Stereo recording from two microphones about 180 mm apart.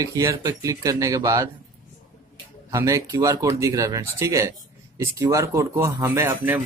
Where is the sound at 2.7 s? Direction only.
15° right (ahead or behind).